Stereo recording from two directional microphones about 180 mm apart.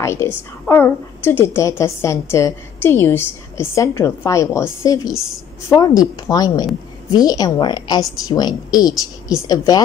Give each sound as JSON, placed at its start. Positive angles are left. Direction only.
{"t": 0.0, "sound": "a woman's voice", "side_deg": 15}